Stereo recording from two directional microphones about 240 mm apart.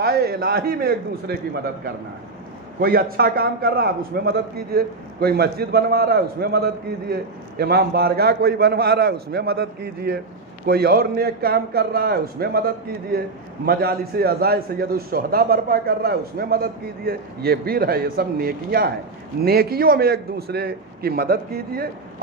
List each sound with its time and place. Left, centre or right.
0.0 s a man's voice: right